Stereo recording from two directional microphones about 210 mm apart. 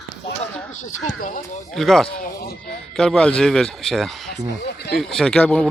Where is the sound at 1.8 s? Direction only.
Centre (ahead or behind).